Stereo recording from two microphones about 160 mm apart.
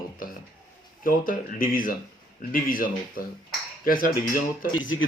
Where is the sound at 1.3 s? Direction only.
60° left (ahead or behind).